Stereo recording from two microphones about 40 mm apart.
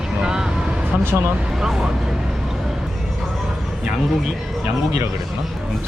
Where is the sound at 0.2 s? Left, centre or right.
Centre.